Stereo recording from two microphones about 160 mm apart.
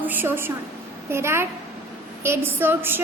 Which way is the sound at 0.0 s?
10° right (ahead or behind).